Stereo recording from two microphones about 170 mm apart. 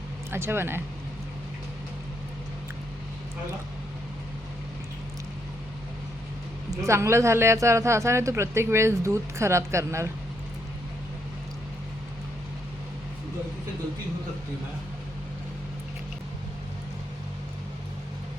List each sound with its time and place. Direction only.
0.3 s a woman's voice: 15° right (ahead or behind)
6.7 s a woman's voice: 15° right (ahead or behind)